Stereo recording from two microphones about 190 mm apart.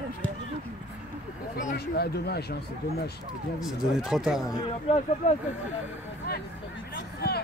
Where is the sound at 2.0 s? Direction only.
60° left (ahead or behind).